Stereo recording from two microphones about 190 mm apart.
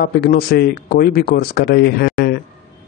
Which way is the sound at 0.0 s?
55° left (ahead or behind).